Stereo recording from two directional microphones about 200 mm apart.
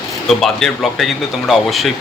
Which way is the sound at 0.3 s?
Centre (ahead or behind).